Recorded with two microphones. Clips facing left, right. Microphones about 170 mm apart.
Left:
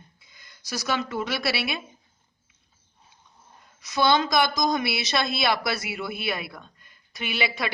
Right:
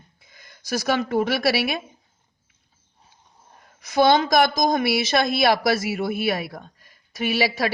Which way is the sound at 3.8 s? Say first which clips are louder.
Right 5 dB; 50° right (ahead or behind).